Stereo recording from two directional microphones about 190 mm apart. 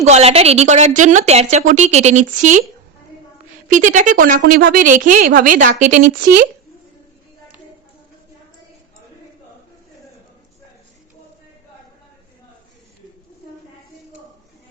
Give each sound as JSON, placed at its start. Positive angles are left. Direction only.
{"t": 0.0, "sound": "a woman's voice", "side_deg": -35}
{"t": 3.7, "sound": "a woman's voice", "side_deg": -40}